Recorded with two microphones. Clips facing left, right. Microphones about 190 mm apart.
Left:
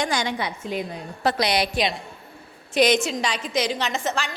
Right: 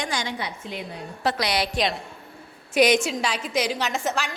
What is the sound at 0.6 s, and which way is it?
Speech, 40° left (ahead or behind).